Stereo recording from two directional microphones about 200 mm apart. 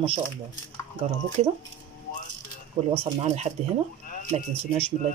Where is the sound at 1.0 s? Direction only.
35° right (ahead or behind).